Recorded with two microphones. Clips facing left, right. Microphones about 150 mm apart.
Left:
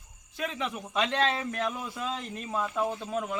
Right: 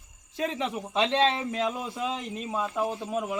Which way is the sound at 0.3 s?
30° right (ahead or behind).